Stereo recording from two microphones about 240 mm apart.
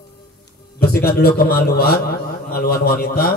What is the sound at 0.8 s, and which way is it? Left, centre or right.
A man's voice, left.